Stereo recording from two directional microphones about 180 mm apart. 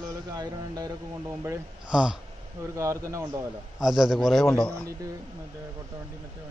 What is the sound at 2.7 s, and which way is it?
Speech, 15° right (ahead or behind).